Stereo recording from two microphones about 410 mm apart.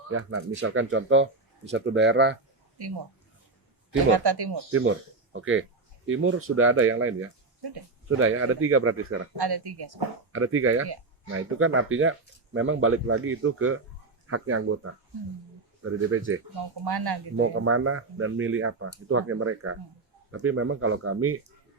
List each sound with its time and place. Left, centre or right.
0.1 s speech: right
2.7 s speech: right
4.1 s speech: right
4.7 s speech: right
9.3 s speech: right
10.3 s speech: right
15.8 s speech: right
16.6 s speech: right
17.3 s speech: right